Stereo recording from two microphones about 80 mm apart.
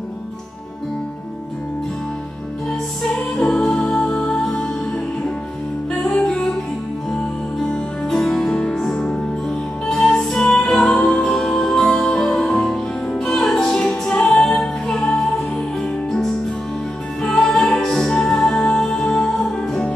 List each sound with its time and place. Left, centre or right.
3.3 s music: centre
7.6 s music: centre